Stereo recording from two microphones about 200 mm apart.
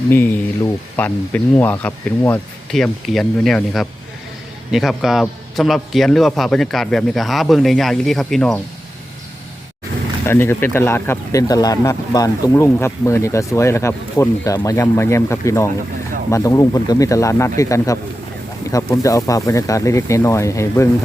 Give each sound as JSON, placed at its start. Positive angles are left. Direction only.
{"t": 0.9, "sound": "a man's voice", "side_deg": 10}
{"t": 10.2, "sound": "speech", "side_deg": 10}